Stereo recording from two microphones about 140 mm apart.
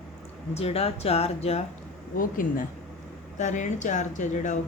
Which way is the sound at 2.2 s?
80° left.